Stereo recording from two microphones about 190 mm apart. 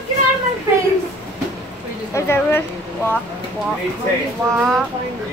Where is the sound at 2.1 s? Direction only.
10° left (ahead or behind).